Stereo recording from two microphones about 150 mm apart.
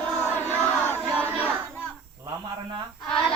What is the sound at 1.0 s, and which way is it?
Choir, 15° right (ahead or behind).